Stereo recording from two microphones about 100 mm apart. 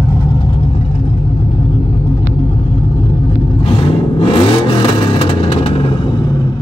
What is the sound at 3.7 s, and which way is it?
Vehicle, 65° left (ahead or behind).